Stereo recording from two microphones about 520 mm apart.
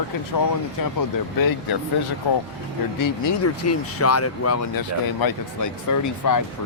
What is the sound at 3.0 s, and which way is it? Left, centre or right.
Speech, left.